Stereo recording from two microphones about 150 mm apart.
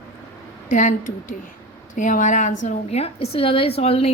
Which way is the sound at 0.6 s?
55° left (ahead or behind).